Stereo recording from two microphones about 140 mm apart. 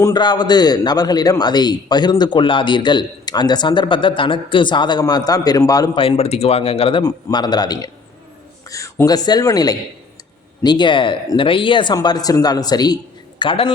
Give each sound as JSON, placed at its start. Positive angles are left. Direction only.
{"t": 0.0, "sound": "a man's voice", "side_deg": 30}
{"t": 6.0, "sound": "speech", "side_deg": 45}
{"t": 7.0, "sound": "a man's voice", "side_deg": 30}